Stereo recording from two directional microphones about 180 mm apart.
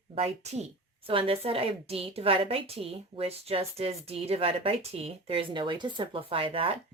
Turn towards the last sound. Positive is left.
turn(degrees=-30)  # may be behind; listen again after turning